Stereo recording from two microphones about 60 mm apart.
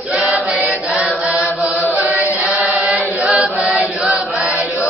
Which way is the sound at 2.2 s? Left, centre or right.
Centre.